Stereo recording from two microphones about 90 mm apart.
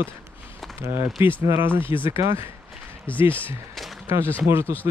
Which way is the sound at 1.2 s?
25° right (ahead or behind).